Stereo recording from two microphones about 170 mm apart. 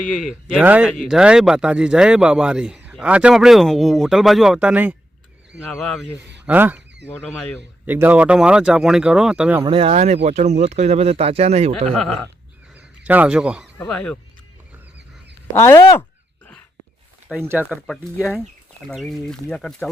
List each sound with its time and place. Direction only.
0.0 s speech: centre (ahead or behind)
6.4 s speech: 10° right (ahead or behind)
7.9 s speech: 10° right (ahead or behind)
9.6 s speech: 35° right (ahead or behind)
11.9 s speech: centre (ahead or behind)
12.7 s a sound: 10° right (ahead or behind)
13.7 s speech: 5° left (ahead or behind)
15.5 s speech: 15° left (ahead or behind)
17.2 s speech: 10° right (ahead or behind)
17.8 s speech: 5° left (ahead or behind)